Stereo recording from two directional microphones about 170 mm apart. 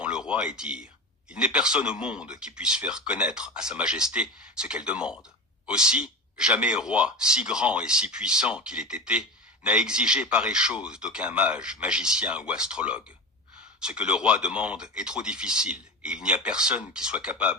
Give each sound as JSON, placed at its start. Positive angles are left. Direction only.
{"t": 0.0, "sound": "speech", "side_deg": -5}